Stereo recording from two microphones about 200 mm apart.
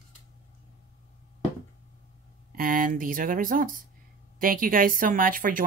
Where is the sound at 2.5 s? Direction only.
45° right (ahead or behind).